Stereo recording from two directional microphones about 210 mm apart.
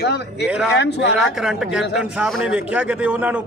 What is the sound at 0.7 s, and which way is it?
Speech, 55° left (ahead or behind).